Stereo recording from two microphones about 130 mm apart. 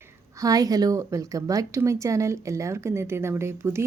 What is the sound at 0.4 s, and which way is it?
Speech, 30° right (ahead or behind).